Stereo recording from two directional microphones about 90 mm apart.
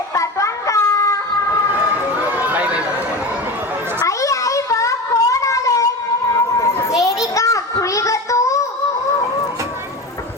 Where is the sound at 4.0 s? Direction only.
35° left (ahead or behind).